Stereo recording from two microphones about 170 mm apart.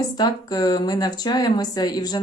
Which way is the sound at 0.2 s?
25° left (ahead or behind).